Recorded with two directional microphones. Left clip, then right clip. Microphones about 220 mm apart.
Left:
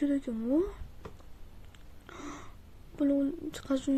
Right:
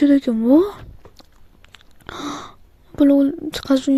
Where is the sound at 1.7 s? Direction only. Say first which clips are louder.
Right 16 dB; 40° right (ahead or behind).